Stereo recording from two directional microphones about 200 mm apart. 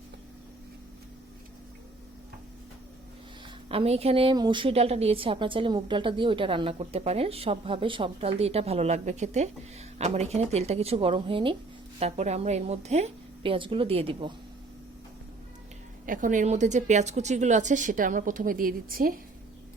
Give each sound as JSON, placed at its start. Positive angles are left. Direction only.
{"t": 3.7, "sound": "a woman's voice", "side_deg": -30}
{"t": 16.0, "sound": "a woman's voice", "side_deg": -40}